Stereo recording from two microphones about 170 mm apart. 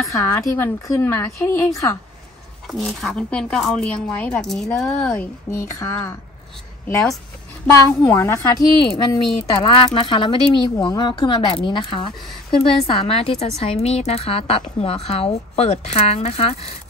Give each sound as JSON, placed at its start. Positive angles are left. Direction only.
{"t": 0.1, "sound": "a woman's voice", "side_deg": 20}
{"t": 2.8, "sound": "a woman's voice", "side_deg": 0}
{"t": 7.7, "sound": "a woman's voice", "side_deg": 10}
{"t": 8.7, "sound": "a woman's voice", "side_deg": 25}